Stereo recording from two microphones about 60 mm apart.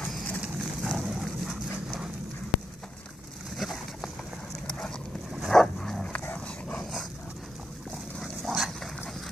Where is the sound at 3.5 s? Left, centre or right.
Centre.